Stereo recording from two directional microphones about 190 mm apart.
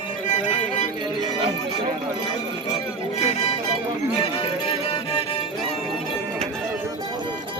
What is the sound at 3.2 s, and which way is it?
Music, 35° left (ahead or behind).